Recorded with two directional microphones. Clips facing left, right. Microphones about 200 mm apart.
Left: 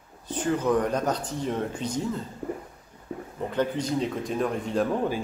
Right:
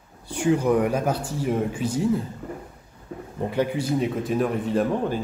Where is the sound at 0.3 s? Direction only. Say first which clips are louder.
Right 4 dB; 10° right (ahead or behind).